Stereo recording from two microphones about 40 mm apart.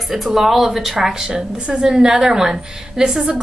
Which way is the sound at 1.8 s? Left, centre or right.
Centre.